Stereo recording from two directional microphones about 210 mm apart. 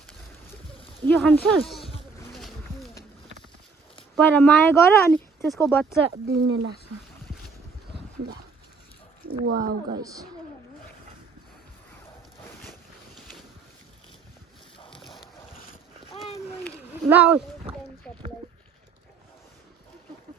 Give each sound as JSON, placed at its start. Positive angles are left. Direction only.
{"t": 1.0, "sound": "speech", "side_deg": 5}
{"t": 2.3, "sound": "a sound", "side_deg": 0}
{"t": 4.1, "sound": "speech", "side_deg": 5}
{"t": 6.1, "sound": "speech", "side_deg": -50}
{"t": 6.4, "sound": "speech", "side_deg": -65}
{"t": 9.4, "sound": "speech", "side_deg": -45}
{"t": 14.9, "sound": "boat", "side_deg": 0}
{"t": 17.1, "sound": "speech", "side_deg": -5}